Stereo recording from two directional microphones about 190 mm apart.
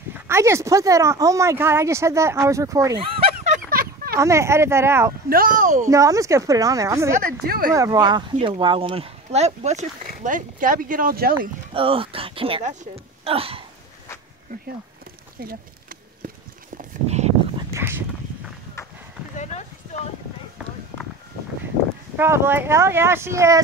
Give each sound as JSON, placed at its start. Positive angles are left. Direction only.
{"t": 0.1, "sound": "speech", "side_deg": -15}
{"t": 3.5, "sound": "a sound", "side_deg": -50}
{"t": 4.2, "sound": "speech", "side_deg": -15}
{"t": 5.3, "sound": "speech", "side_deg": -50}
{"t": 5.9, "sound": "speech", "side_deg": -15}
{"t": 7.4, "sound": "speech", "side_deg": -50}
{"t": 7.7, "sound": "speech", "side_deg": -15}
{"t": 11.7, "sound": "speech", "side_deg": -30}
{"t": 16.7, "sound": "a sound", "side_deg": -35}
{"t": 17.6, "sound": "dog", "side_deg": -15}
{"t": 19.3, "sound": "clip-clop", "side_deg": 40}
{"t": 22.1, "sound": "speech", "side_deg": -10}